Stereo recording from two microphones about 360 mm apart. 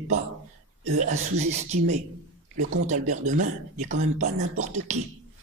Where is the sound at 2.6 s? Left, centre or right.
Right.